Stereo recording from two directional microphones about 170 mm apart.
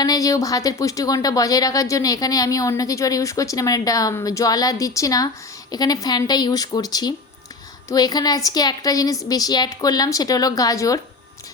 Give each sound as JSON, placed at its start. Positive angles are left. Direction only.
{"t": 0.0, "sound": "speech", "side_deg": 20}